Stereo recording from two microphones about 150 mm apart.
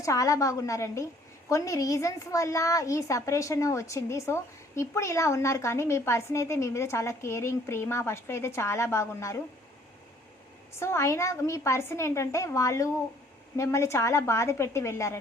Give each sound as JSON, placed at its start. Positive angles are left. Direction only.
{"t": 0.0, "sound": "a child's voice", "side_deg": 20}
{"t": 10.8, "sound": "a child's voice", "side_deg": 20}